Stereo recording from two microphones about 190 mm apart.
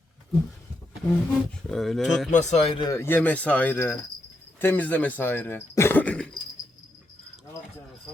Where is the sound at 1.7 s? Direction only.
Centre (ahead or behind).